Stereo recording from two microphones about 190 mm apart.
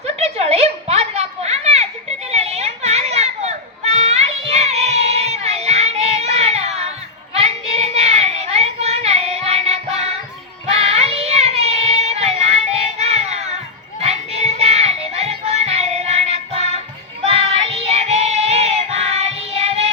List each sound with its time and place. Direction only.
0.0 s a sound: 35° right (ahead or behind)
2.3 s children playing: 35° right (ahead or behind)
7.3 s child singing: 35° right (ahead or behind)
14.0 s music: 35° right (ahead or behind)